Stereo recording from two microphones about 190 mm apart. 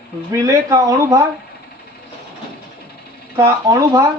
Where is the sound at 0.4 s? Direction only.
15° right (ahead or behind).